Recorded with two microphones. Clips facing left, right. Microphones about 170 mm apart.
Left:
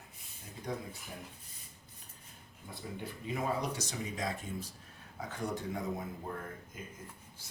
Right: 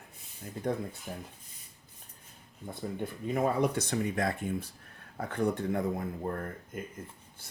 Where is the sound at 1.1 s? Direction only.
60° right (ahead or behind).